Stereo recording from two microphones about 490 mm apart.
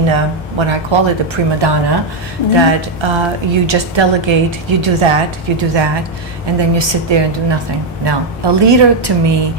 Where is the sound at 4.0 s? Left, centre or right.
Right.